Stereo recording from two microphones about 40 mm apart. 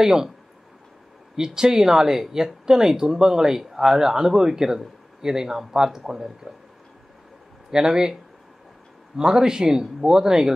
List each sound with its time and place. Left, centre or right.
0.0 s speech: centre
1.3 s speech: centre
7.7 s speech: centre
9.1 s speech: centre